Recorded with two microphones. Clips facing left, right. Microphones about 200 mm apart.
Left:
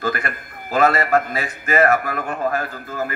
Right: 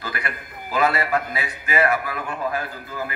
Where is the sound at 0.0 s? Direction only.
45° left (ahead or behind).